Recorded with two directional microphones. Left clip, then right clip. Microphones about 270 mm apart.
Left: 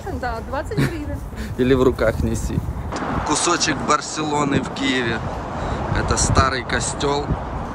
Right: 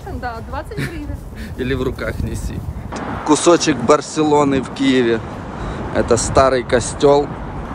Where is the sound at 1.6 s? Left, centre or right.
Centre.